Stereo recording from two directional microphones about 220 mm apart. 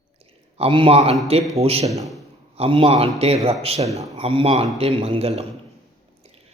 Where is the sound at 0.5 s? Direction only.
25° right (ahead or behind).